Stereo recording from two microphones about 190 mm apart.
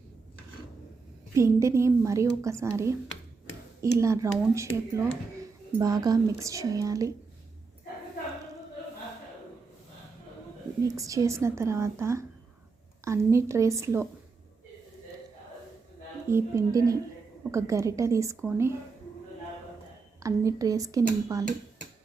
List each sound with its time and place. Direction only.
1.4 s speech: 15° right (ahead or behind)
10.8 s speech: 15° right (ahead or behind)
16.3 s speech: 15° right (ahead or behind)
20.1 s speech: 15° right (ahead or behind)